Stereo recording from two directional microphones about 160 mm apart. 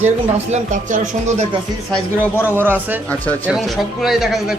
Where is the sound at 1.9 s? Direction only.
10° left (ahead or behind).